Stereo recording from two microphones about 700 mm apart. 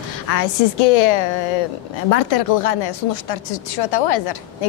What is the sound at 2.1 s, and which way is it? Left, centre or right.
Speech, left.